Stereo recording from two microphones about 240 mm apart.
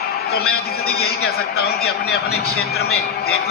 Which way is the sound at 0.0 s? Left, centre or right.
Left.